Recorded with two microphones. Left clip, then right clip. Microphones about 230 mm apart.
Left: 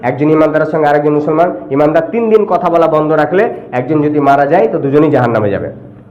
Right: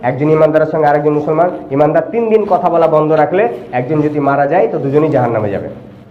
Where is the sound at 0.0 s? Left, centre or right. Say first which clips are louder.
Even; left.